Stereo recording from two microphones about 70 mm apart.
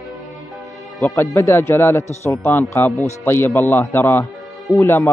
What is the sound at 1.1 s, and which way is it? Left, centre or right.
Speech, left.